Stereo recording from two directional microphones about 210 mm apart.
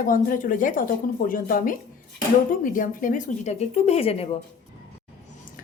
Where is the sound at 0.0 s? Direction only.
40° left (ahead or behind).